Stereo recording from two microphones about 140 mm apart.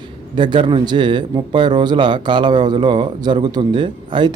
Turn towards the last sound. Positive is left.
turn(degrees=-35)  # may be behind; listen again after turning